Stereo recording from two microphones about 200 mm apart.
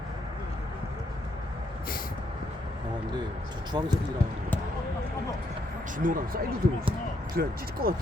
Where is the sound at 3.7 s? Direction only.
20° right (ahead or behind).